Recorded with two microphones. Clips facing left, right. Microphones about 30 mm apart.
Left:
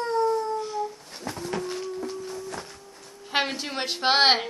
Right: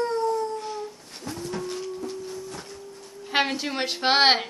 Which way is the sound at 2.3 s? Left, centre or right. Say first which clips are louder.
Left 1 dB; left.